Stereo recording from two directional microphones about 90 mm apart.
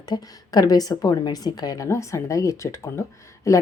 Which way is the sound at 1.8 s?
35° left (ahead or behind).